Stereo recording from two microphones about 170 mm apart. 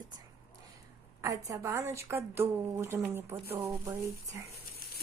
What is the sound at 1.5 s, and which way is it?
A woman's voice, 15° right (ahead or behind).